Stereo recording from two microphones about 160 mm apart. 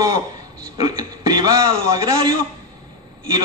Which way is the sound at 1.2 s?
25° right (ahead or behind).